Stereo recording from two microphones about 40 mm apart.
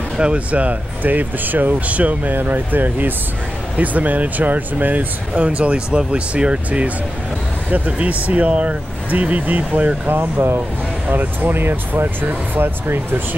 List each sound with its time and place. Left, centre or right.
0.2 s speech: right
2.3 s speech: right
3.7 s speech: right
10.1 s speech: right
11.1 s speech: right